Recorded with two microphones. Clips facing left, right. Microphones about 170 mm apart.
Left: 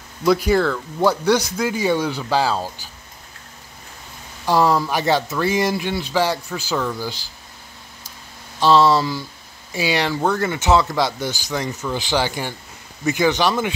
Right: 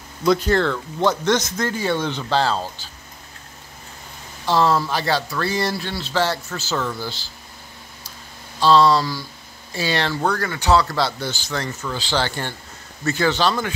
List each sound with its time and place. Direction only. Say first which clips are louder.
0.2 s speech: left 1 dB; 10° left (ahead or behind)
4.5 s speech: left 1 dB; 15° left (ahead or behind)
8.5 s speech: even; 15° left (ahead or behind)